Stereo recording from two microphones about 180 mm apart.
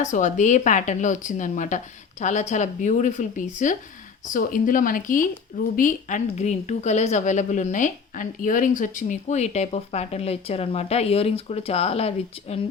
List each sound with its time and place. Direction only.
0.0 s a woman's voice: 45° left (ahead or behind)